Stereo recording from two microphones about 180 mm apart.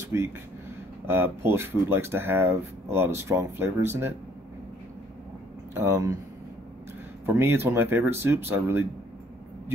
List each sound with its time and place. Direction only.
0.1 s speech: 15° right (ahead or behind)
5.8 s speech: 15° right (ahead or behind)
7.2 s speech: 10° right (ahead or behind)